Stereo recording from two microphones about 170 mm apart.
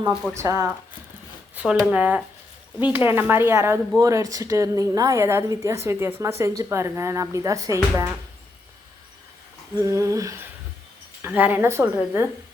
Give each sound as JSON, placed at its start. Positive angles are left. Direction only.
{"t": 0.1, "sound": "speech", "side_deg": 0}
{"t": 0.3, "sound": "speech", "side_deg": -20}
{"t": 1.5, "sound": "speech", "side_deg": -5}
{"t": 9.8, "sound": "speech", "side_deg": -20}